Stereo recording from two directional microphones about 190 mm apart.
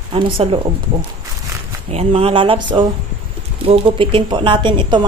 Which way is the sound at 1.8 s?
30° right (ahead or behind).